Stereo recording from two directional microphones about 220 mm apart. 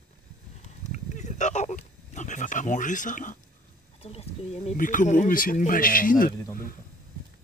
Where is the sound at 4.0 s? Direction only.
25° left (ahead or behind).